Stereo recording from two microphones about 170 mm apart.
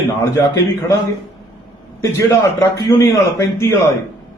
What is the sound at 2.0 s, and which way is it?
A man's voice, 15° left (ahead or behind).